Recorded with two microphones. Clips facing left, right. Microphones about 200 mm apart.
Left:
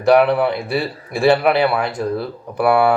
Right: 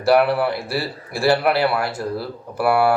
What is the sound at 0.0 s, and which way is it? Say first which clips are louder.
Speech: left 3 dB; 5° right (ahead or behind).